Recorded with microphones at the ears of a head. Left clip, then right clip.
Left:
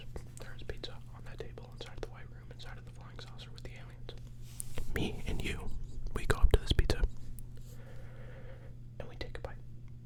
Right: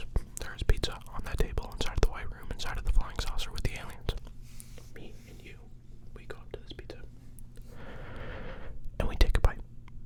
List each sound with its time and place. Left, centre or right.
0.0 s whispering: right
4.7 s whispering: left
7.8 s whispering: right